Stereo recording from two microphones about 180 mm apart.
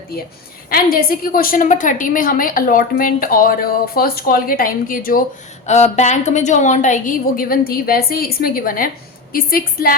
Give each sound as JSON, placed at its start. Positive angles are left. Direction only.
{"t": 0.7, "sound": "a woman's voice", "side_deg": 55}
{"t": 5.6, "sound": "a woman's voice", "side_deg": 40}